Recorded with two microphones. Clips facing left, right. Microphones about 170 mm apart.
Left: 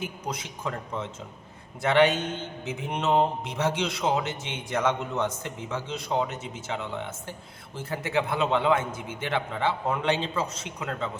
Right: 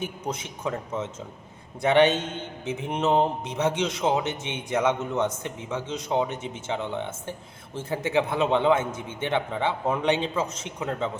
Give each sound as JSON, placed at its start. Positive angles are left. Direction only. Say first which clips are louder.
{"t": 0.0, "sound": "speech", "louder": "right 2 dB", "side_deg": -25}
{"t": 1.8, "sound": "speech", "louder": "right 2 dB", "side_deg": -20}